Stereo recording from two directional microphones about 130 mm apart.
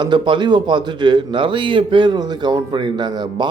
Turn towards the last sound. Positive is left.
turn(degrees=-35)  # may be behind; listen again after turning